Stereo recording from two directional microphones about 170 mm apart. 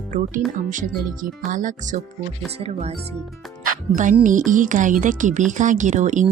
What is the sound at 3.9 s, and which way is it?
Speech, 50° right (ahead or behind).